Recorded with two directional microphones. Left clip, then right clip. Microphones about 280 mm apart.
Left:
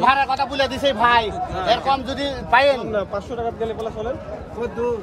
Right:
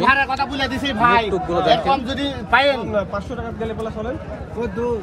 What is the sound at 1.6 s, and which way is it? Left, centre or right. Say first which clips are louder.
Speech: right 2 dB; left.